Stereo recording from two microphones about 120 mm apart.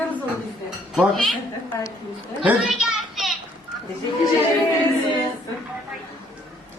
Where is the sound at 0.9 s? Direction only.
Centre (ahead or behind).